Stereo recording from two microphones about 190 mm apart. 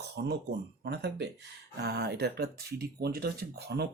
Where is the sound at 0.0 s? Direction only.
60° right (ahead or behind).